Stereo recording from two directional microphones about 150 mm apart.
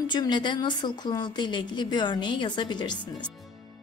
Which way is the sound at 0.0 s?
30° left (ahead or behind).